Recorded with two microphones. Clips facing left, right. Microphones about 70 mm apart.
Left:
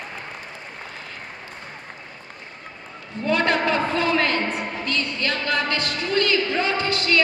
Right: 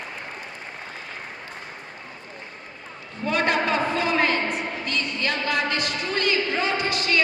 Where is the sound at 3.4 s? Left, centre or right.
Centre.